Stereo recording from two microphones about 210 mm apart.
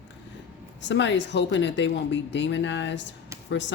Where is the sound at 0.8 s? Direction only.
60° left (ahead or behind).